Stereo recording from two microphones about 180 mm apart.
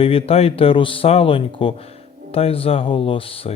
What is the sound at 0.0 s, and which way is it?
Speech, 30° left (ahead or behind).